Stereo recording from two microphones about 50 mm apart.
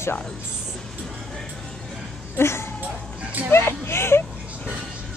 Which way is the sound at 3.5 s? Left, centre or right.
Left.